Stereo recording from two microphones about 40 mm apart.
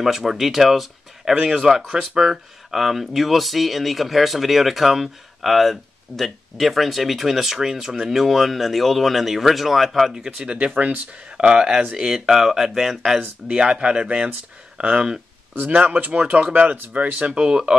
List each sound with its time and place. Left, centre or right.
0.0 s speech: centre
10.4 s speech: right
11.9 s speech: centre
13.5 s speech: centre
15.5 s speech: right
17.4 s speech: right